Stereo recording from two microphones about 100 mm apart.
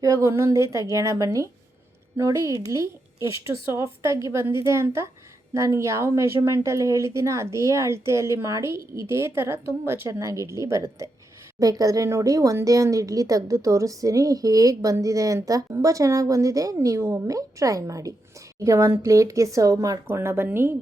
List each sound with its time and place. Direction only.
0.0 s speech: 30° right (ahead or behind)
20.1 s speech: 25° right (ahead or behind)